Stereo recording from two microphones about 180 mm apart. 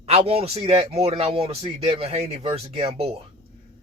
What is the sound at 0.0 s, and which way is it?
Speech, 35° right (ahead or behind).